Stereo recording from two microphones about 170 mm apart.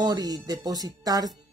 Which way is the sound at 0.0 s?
20° right (ahead or behind).